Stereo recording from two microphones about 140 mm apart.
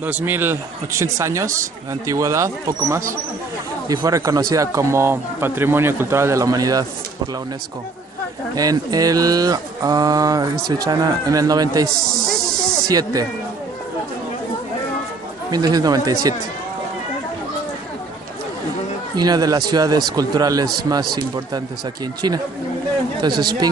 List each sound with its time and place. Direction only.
0.0 s speech: 15° right (ahead or behind)
8.5 s speech: 25° right (ahead or behind)
11.9 s snake: 5° left (ahead or behind)
12.8 s speech: 25° right (ahead or behind)
15.5 s speech: 25° right (ahead or behind)
19.1 s speech: 30° right (ahead or behind)
23.3 s speech: 90° right